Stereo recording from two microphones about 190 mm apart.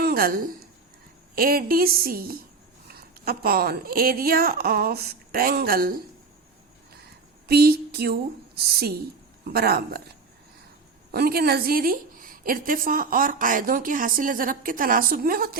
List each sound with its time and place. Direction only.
0.0 s a sound: 50° right (ahead or behind)
1.4 s a woman's voice: 50° right (ahead or behind)
7.4 s speech: 55° right (ahead or behind)
11.1 s a woman's voice: 55° right (ahead or behind)